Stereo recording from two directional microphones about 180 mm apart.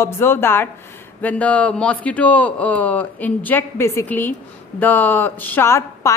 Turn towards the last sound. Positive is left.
turn(degrees=15)  # may be behind; listen again after turning